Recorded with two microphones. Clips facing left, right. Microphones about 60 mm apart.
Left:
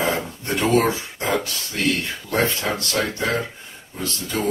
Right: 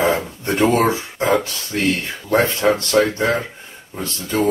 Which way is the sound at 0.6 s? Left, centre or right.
Right.